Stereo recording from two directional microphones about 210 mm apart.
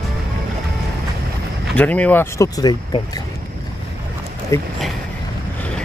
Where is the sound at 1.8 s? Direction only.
5° left (ahead or behind).